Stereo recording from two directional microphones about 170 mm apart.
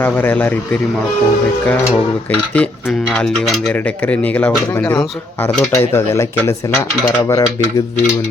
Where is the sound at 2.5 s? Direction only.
10° left (ahead or behind).